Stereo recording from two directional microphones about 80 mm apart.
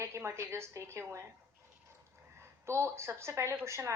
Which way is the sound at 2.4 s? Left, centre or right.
Right.